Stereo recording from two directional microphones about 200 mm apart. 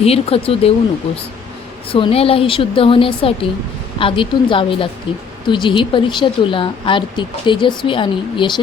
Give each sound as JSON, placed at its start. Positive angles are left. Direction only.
{"t": 0.0, "sound": "speech", "side_deg": 30}
{"t": 1.9, "sound": "speech", "side_deg": 30}